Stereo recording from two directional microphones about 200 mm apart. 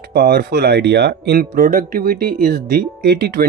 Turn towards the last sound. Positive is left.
turn(degrees=-50)  # may be behind; listen again after turning